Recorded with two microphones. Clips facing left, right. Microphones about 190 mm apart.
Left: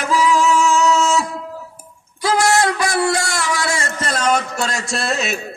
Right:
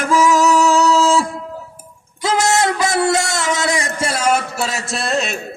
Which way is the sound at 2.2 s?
20° right (ahead or behind).